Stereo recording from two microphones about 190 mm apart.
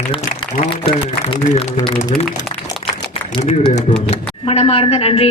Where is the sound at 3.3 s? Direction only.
30° left (ahead or behind).